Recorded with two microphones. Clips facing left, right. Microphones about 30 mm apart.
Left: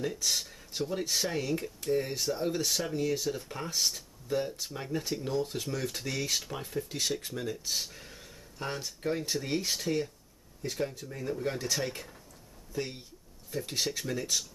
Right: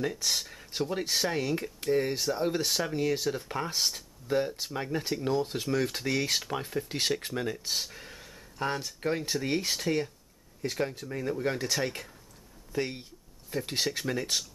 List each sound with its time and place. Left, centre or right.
0.1 s a sound: centre
0.7 s speech: right
6.9 s speech: right
7.5 s speech: centre
7.8 s a sound: centre
9.0 s speech: right